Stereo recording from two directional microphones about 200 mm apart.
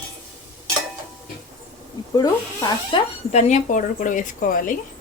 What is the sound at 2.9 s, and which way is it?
Speech, 30° left (ahead or behind).